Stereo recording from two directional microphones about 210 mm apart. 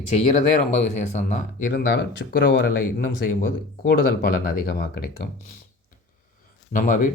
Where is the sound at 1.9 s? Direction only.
50° left (ahead or behind).